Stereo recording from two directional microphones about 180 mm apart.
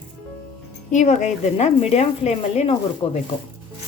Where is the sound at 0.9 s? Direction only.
40° left (ahead or behind).